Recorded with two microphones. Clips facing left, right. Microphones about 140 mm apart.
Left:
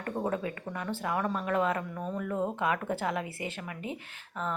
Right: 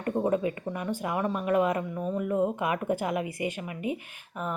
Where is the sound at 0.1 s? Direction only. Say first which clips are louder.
Right 6 dB; 15° right (ahead or behind).